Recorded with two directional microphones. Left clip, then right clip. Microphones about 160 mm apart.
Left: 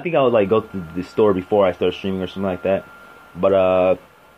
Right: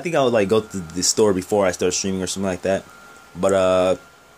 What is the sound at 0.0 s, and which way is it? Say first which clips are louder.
Speech: left 2 dB; 30° right (ahead or behind).